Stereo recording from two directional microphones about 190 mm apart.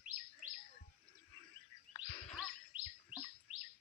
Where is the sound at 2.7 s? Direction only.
25° left (ahead or behind).